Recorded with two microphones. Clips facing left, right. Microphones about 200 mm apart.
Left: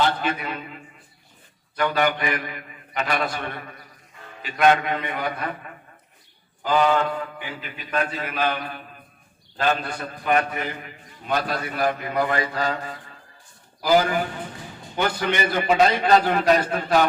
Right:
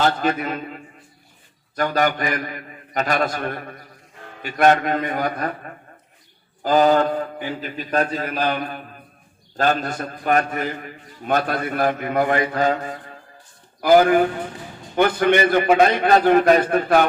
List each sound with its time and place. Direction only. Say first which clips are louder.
0.0 s a man's voice: right 3 dB; 45° right (ahead or behind)